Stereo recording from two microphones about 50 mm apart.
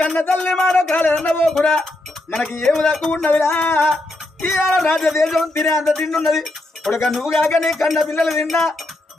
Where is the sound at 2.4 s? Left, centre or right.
Centre.